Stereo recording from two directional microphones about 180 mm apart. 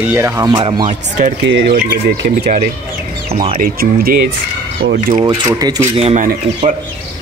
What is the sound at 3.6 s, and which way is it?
Speech, 55° right (ahead or behind).